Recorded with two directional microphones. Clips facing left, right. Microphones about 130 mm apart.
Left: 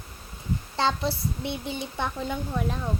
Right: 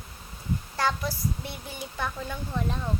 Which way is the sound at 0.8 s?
25° left (ahead or behind).